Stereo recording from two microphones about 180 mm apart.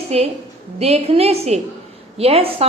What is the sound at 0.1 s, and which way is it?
A woman's voice, 35° right (ahead or behind).